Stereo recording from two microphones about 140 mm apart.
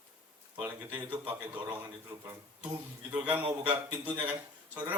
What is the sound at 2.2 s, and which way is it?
Speech, 20° right (ahead or behind).